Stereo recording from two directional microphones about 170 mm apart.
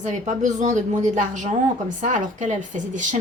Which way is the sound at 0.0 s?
45° right (ahead or behind).